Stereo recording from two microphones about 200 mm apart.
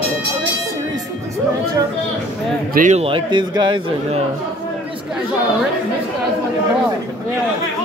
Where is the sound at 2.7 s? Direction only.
40° right (ahead or behind).